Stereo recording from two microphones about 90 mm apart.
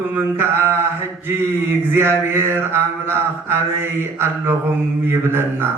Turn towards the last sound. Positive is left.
turn(degrees=-25)  # may be behind; listen again after turning